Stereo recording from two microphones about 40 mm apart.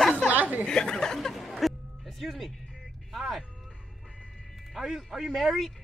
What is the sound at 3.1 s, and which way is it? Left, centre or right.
Speech, centre.